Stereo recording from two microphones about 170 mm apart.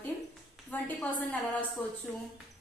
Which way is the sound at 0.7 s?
10° left (ahead or behind).